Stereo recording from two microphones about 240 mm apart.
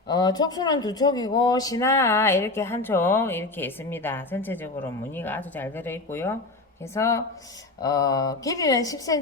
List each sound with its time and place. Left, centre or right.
0.1 s speech: centre